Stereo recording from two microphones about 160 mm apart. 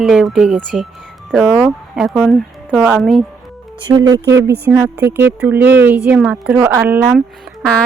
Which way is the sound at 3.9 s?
25° right (ahead or behind).